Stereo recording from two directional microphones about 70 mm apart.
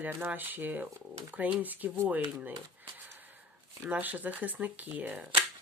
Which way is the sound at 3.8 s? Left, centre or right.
Right.